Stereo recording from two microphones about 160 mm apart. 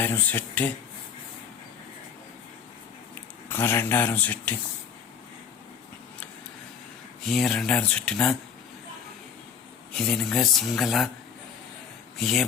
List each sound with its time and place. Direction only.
0.0 s speech: 10° left (ahead or behind)
3.5 s speech: 15° left (ahead or behind)
7.3 s speech: centre (ahead or behind)
9.9 s speech: 5° left (ahead or behind)
12.1 s speech: centre (ahead or behind)